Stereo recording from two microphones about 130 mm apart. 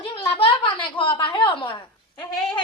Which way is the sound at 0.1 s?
45° left (ahead or behind).